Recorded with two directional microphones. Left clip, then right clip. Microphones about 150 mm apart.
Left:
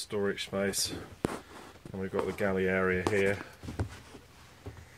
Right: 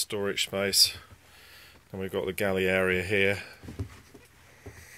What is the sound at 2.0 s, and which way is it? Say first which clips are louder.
Speech: right 2 dB; 50° right (ahead or behind).